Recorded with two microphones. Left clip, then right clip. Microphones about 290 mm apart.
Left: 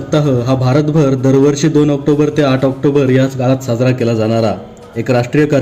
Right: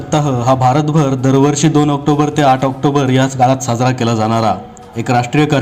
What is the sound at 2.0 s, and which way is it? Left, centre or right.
Speech, right.